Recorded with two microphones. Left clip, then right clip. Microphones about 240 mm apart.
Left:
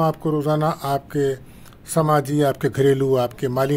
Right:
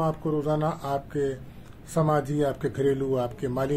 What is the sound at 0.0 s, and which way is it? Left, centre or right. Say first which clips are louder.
A man's voice: left 6 dB; left.